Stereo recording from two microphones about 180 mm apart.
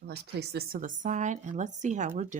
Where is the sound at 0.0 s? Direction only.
65° right (ahead or behind).